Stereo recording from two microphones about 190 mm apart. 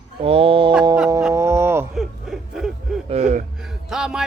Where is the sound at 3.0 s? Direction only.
35° right (ahead or behind).